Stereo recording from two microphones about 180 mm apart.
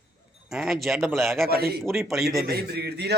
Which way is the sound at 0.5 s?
Centre (ahead or behind).